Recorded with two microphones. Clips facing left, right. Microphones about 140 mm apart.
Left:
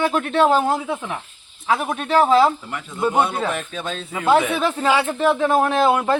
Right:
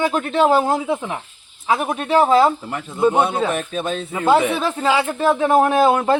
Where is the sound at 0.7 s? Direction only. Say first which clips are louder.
Right 2 dB; 20° right (ahead or behind).